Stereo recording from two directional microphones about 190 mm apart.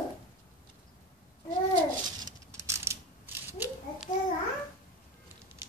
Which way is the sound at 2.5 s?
15° right (ahead or behind).